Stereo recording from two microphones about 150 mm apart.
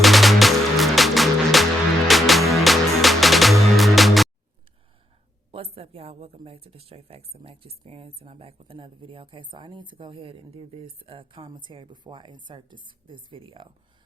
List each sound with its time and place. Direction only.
0.0 s music: centre (ahead or behind)
5.5 s speech: 40° right (ahead or behind)